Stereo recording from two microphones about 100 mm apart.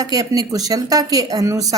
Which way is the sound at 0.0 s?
40° right (ahead or behind).